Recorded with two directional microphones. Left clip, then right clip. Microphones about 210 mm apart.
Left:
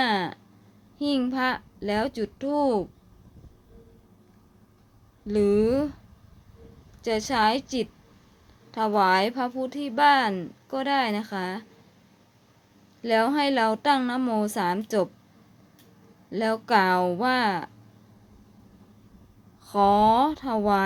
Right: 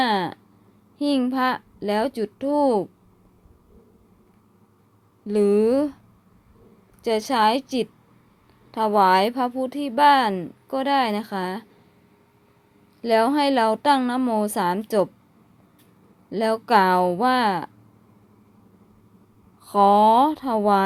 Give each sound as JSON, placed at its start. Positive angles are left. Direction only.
{"t": 0.0, "sound": "a sound", "side_deg": -20}
{"t": 0.9, "sound": "speech", "side_deg": -20}
{"t": 5.2, "sound": "speech", "side_deg": -20}
{"t": 7.0, "sound": "speech", "side_deg": -20}
{"t": 13.0, "sound": "speech", "side_deg": -20}
{"t": 16.3, "sound": "speech", "side_deg": -20}
{"t": 19.6, "sound": "speech", "side_deg": -20}